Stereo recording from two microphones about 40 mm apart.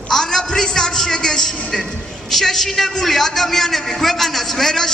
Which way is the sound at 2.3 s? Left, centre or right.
Centre.